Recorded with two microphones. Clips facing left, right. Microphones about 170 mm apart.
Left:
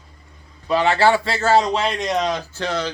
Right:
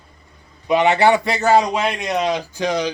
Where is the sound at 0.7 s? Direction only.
20° right (ahead or behind).